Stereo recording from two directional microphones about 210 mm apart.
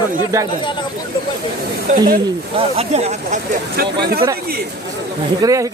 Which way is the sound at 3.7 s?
50° right (ahead or behind).